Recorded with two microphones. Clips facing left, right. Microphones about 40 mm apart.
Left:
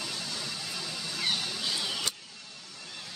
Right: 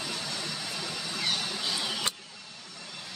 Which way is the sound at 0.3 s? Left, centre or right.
Centre.